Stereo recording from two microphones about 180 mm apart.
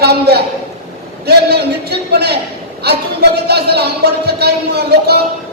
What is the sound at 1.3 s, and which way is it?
A man's voice, 60° right (ahead or behind).